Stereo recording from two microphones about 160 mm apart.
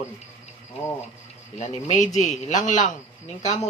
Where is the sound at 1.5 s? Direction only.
50° left (ahead or behind).